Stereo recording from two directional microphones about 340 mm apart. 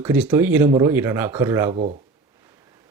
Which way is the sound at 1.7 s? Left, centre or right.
Right.